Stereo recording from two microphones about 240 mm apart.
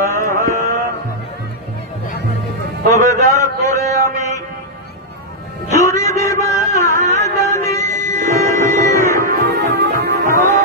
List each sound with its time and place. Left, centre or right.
0.0 s a sound: centre
2.9 s mantra: centre
5.7 s music: centre
9.2 s music: right